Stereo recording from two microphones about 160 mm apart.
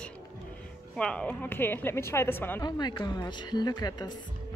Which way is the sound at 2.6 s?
25° left (ahead or behind).